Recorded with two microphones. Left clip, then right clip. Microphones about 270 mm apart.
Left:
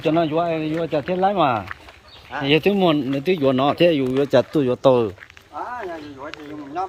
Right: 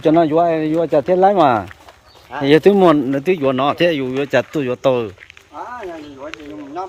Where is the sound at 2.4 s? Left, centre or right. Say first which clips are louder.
Right 7 dB; right.